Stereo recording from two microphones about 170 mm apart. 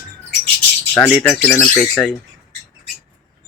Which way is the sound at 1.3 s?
5° left (ahead or behind).